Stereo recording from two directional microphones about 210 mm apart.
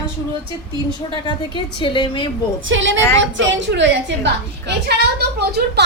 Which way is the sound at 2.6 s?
65° right (ahead or behind).